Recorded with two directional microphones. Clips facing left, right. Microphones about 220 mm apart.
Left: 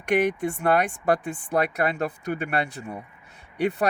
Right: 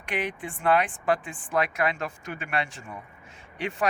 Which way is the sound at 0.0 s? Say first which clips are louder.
Left 9 dB; 45° left (ahead or behind).